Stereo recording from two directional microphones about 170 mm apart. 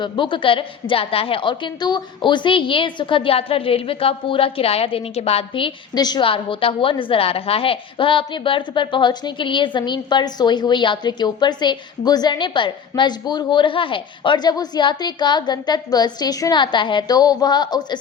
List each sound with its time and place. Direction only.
0.0 s a woman's voice: 30° left (ahead or behind)